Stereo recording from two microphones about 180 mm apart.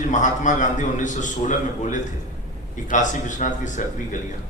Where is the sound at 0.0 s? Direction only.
45° left (ahead or behind).